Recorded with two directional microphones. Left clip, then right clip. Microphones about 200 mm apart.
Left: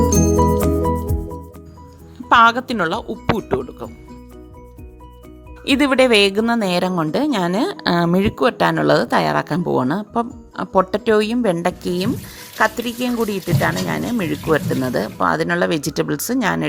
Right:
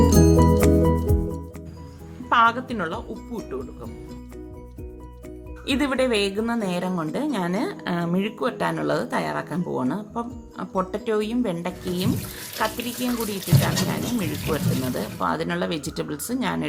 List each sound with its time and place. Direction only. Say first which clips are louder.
0.0 s music: left 2 dB; centre (ahead or behind)
2.3 s speech: left 7 dB; 55° left (ahead or behind)
5.6 s a woman's voice: left 8 dB; 45° left (ahead or behind)